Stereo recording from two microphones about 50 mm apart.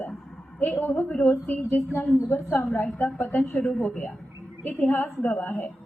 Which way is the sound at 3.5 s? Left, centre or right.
Centre.